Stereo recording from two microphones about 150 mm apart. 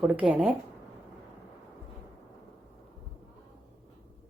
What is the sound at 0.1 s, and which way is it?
Speech, 5° right (ahead or behind).